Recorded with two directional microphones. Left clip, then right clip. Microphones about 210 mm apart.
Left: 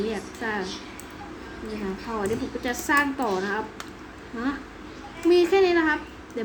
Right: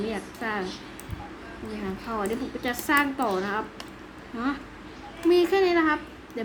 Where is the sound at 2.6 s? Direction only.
15° right (ahead or behind).